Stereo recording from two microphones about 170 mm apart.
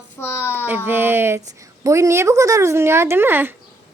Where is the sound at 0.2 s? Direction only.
15° left (ahead or behind).